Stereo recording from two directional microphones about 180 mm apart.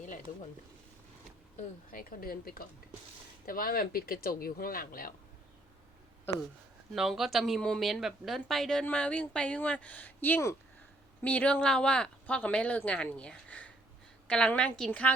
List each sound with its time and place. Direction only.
1.5 s speech: 50° left (ahead or behind)
6.9 s speech: centre (ahead or behind)